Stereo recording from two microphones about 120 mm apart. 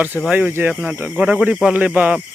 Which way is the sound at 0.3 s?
10° right (ahead or behind).